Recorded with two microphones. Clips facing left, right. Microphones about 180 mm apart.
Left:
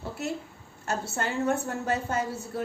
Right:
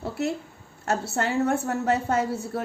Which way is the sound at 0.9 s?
60° right (ahead or behind).